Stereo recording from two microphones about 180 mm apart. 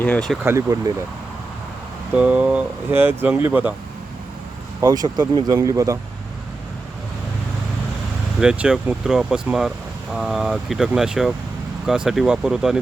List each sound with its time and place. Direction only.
0.0 s speech: 5° left (ahead or behind)
0.4 s speech: 15° right (ahead or behind)
2.1 s speech: 5° right (ahead or behind)
4.8 s speech: 20° right (ahead or behind)
8.4 s speech: 5° right (ahead or behind)